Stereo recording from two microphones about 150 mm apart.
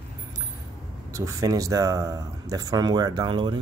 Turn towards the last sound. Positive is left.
turn(degrees=-30)  # may be behind; listen again after turning